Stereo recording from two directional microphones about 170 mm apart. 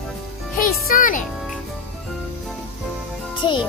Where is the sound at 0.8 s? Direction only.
55° left (ahead or behind).